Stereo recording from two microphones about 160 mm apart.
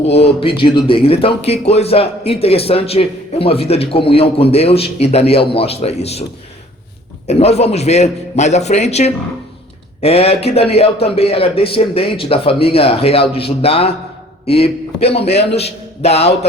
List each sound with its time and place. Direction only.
0.0 s a man's voice: 40° left (ahead or behind)
7.3 s a man's voice: 40° left (ahead or behind)